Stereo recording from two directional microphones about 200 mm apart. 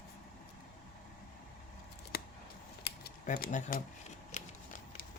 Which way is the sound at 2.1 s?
50° left (ahead or behind).